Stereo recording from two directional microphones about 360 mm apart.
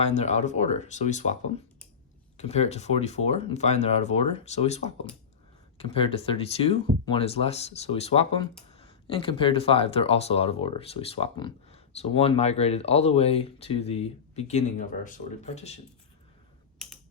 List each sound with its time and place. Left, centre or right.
0.0 s speech: centre
2.4 s speech: centre
16.7 s typing: centre